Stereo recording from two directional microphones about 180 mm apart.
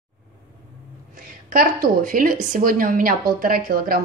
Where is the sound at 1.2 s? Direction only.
50° right (ahead or behind).